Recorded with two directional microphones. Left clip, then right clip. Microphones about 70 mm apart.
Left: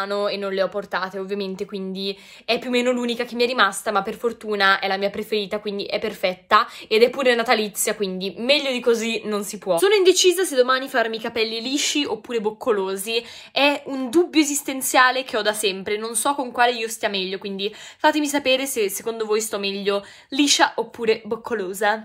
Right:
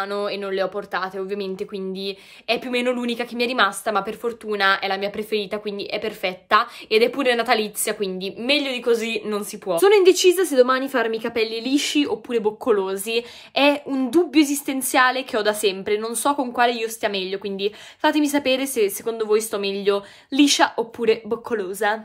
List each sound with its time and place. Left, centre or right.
0.0 s a woman's voice: right
9.8 s a woman's voice: right
15.4 s a woman's voice: right